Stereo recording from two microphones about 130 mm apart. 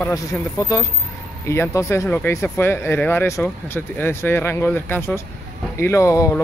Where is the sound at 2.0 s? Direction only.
10° left (ahead or behind).